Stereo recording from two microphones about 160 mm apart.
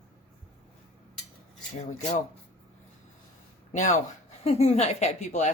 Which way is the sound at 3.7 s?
50° left (ahead or behind).